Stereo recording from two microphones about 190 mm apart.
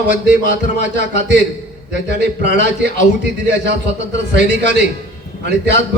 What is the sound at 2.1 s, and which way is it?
A man's voice, 60° right (ahead or behind).